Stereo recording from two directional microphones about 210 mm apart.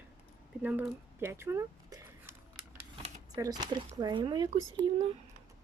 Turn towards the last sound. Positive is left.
turn(degrees=-20)  # may be behind; listen again after turning